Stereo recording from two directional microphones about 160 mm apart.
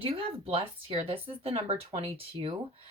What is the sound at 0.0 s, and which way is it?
Speech, 35° right (ahead or behind).